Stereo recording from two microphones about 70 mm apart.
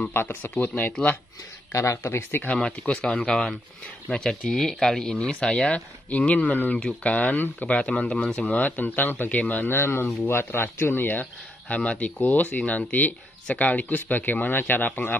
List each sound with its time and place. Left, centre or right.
0.1 s speech: left
1.7 s speech: left
2.5 s speech: centre
3.3 s speech: centre
6.0 s speech: left
9.4 s speech: centre
9.7 s speech: left